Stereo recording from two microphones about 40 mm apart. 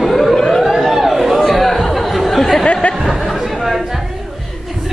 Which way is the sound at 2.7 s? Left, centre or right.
Left.